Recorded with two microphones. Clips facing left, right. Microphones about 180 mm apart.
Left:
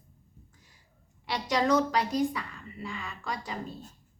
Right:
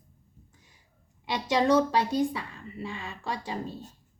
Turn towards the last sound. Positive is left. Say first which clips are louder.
# right 2 dB
turn(degrees=-30)  # may be behind; listen again after turning